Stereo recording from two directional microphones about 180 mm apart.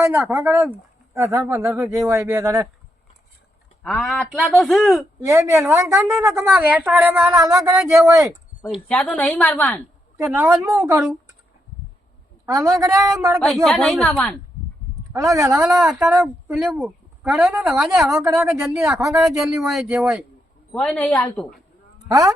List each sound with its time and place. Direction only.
0.0 s speech: 15° right (ahead or behind)
3.8 s speech: centre (ahead or behind)
5.2 s speech: 15° right (ahead or behind)
8.7 s a woman's voice: 5° left (ahead or behind)
10.2 s speech: 5° right (ahead or behind)
12.5 s speech: 20° right (ahead or behind)
13.7 s a woman's voice: centre (ahead or behind)
15.1 s speech: 20° right (ahead or behind)
15.5 s a woman's voice: centre (ahead or behind)